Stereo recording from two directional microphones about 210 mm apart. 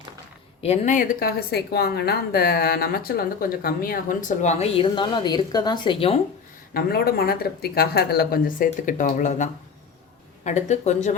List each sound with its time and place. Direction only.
0.6 s a woman's voice: 35° left (ahead or behind)
6.7 s a woman's voice: 45° left (ahead or behind)